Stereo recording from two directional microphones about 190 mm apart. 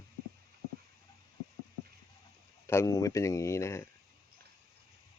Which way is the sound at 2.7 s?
15° left (ahead or behind).